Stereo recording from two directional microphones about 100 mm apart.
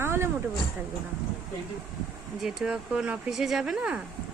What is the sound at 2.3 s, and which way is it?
Speech, 5° right (ahead or behind).